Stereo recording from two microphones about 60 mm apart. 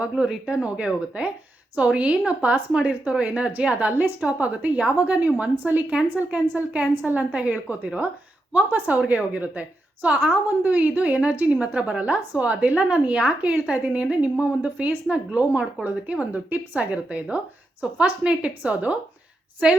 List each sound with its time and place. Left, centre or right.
0.0 s a woman's voice: centre